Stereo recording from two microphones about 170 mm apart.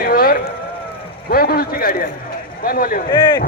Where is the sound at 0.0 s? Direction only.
60° left (ahead or behind).